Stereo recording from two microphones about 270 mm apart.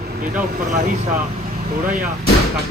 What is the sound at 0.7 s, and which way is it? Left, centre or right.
Speech, right.